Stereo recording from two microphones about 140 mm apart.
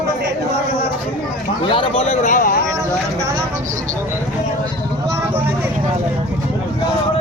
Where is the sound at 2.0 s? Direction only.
55° left (ahead or behind); by 2.6 s 75° left (ahead or behind).